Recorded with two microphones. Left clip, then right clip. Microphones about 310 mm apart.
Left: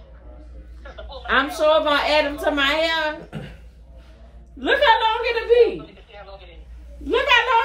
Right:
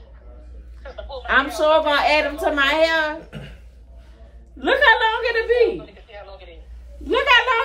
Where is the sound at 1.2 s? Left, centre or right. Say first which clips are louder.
Right 1 dB; centre.